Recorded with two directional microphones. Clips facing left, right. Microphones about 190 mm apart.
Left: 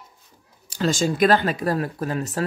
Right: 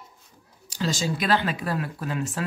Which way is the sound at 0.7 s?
50° left (ahead or behind).